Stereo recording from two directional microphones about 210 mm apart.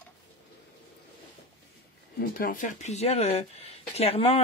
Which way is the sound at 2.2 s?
45° left (ahead or behind).